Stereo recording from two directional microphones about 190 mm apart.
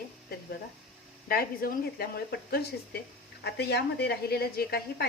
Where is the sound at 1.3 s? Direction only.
50° left (ahead or behind).